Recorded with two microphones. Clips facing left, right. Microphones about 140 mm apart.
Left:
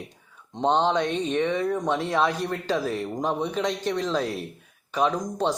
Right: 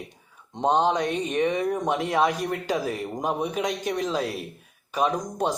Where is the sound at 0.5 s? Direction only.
10° right (ahead or behind).